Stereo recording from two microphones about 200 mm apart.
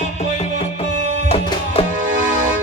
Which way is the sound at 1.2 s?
30° left (ahead or behind).